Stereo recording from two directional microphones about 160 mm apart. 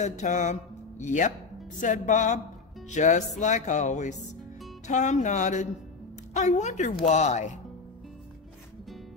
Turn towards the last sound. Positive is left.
turn(degrees=45)  # may be behind; listen again after turning